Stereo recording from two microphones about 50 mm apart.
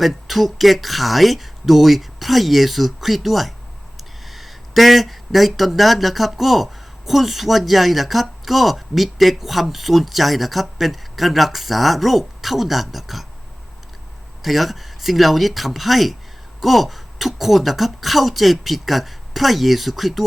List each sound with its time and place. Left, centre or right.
0.0 s speech: centre
14.4 s speech: centre